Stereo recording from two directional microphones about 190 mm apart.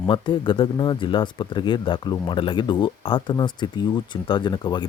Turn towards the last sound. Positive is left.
turn(degrees=25)  # may be behind; listen again after turning